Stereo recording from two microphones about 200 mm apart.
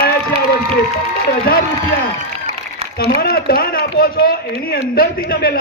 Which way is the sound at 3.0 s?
50° left (ahead or behind).